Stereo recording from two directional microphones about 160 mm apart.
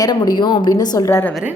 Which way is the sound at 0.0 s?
25° left (ahead or behind).